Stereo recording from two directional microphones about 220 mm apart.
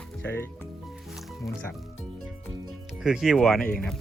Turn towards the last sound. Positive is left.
turn(degrees=0)  # may be behind; listen again after turning